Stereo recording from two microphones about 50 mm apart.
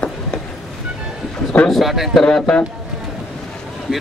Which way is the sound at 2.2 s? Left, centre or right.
Centre.